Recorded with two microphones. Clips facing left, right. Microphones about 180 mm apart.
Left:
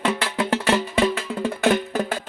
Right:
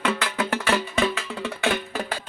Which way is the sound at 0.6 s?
35° left (ahead or behind).